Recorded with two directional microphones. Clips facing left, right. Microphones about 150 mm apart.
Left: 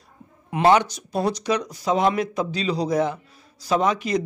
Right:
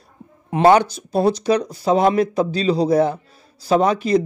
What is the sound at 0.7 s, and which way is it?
Speech, 35° right (ahead or behind).